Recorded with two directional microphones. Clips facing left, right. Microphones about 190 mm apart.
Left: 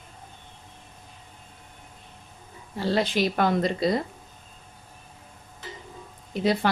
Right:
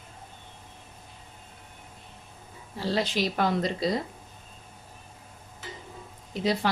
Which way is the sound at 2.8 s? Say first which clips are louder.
Left 3 dB; 55° left (ahead or behind).